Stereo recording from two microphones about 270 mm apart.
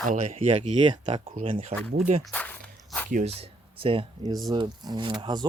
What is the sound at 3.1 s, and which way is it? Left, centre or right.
Speech, right.